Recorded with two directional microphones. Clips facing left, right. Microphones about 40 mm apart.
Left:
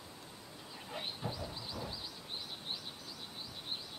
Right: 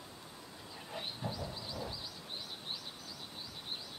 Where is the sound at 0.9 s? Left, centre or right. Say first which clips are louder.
Even; centre.